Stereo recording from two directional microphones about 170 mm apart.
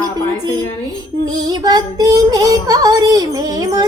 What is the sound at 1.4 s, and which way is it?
Female singing, 20° right (ahead or behind).